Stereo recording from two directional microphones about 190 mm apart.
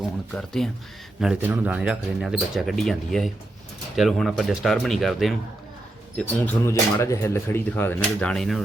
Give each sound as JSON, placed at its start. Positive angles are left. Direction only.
{"t": 0.3, "sound": "speech", "side_deg": 0}